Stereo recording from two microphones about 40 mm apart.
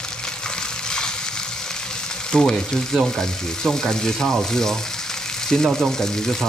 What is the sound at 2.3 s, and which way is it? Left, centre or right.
Speech, centre.